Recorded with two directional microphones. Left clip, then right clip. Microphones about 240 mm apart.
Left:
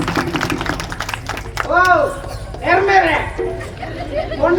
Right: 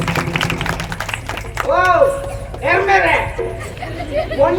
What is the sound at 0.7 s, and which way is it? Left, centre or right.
Tap, right.